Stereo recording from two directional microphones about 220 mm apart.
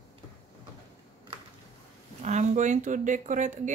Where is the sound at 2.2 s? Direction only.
30° right (ahead or behind).